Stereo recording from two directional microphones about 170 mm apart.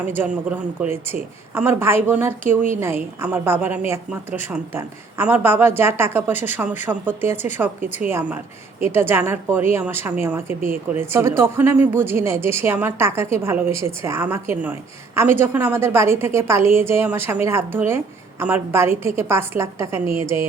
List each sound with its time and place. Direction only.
0.2 s a woman's voice: 10° right (ahead or behind)